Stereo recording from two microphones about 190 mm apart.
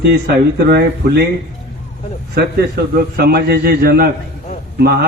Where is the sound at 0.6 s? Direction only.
55° right (ahead or behind).